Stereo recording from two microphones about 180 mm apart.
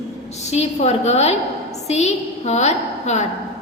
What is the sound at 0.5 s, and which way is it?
A woman's voice, 35° left (ahead or behind).